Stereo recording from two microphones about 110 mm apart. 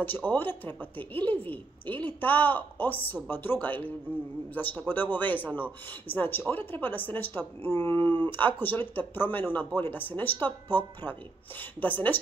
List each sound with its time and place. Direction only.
0.0 s speech: 15° left (ahead or behind)
11.8 s speech: 15° left (ahead or behind)